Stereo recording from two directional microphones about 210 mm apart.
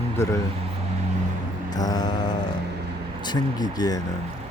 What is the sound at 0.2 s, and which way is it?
Speech, 10° left (ahead or behind).